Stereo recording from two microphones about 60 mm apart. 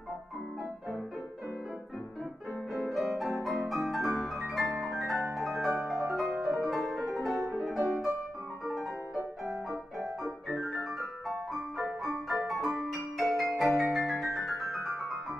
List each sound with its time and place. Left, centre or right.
2.7 s music: centre
9.5 s music: centre